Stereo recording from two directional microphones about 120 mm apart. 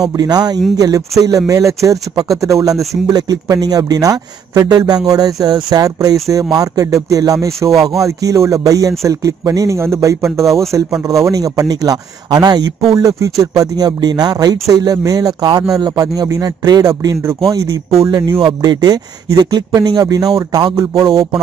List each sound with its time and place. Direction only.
0.0 s speech: 35° right (ahead or behind)
21.0 s a man's voice: 45° right (ahead or behind)